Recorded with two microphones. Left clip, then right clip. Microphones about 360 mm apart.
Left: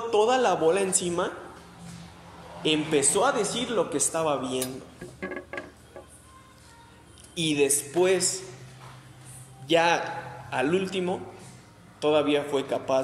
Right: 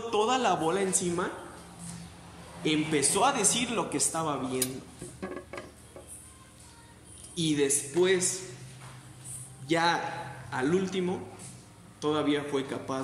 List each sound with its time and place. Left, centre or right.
0.1 s speech: centre
2.6 s speech: centre
5.2 s a sound: left
7.3 s speech: centre
9.7 s speech: centre